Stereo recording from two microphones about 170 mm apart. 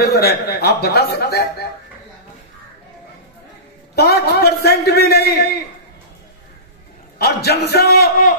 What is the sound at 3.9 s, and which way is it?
A man's voice, 70° left (ahead or behind).